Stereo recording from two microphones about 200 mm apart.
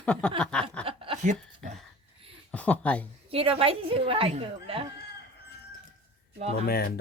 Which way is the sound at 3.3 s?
30° right (ahead or behind).